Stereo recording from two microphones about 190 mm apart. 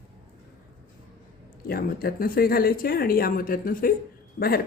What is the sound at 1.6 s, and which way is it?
Speech, 50° left (ahead or behind).